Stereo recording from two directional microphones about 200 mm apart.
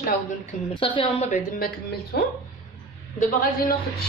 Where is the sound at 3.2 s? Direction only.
45° left (ahead or behind).